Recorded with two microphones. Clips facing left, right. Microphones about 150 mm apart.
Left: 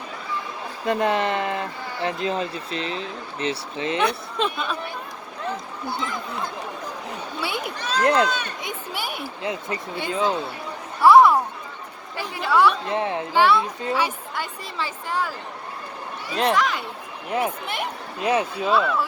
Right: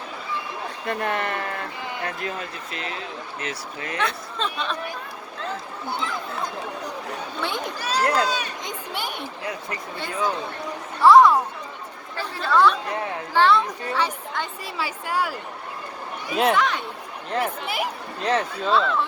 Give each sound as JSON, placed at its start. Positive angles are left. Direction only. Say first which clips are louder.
{"t": 0.9, "sound": "speech", "louder": "left 5 dB", "side_deg": 20}
{"t": 6.0, "sound": "speech", "louder": "right 1 dB", "side_deg": 5}
{"t": 7.4, "sound": "a sound", "louder": "even", "side_deg": 10}
{"t": 7.8, "sound": "speech", "louder": "right 1 dB", "side_deg": -10}
{"t": 8.6, "sound": "a sound", "louder": "even", "side_deg": 10}
{"t": 9.4, "sound": "speech", "louder": "left 6 dB", "side_deg": 20}
{"t": 12.9, "sound": "speech", "louder": "left 3 dB", "side_deg": 20}
{"t": 14.8, "sound": "a woman's voice", "louder": "right 1 dB", "side_deg": -10}
{"t": 18.2, "sound": "speech", "louder": "left 2 dB", "side_deg": 10}